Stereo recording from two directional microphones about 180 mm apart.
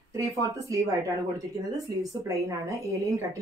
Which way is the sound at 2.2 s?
15° right (ahead or behind).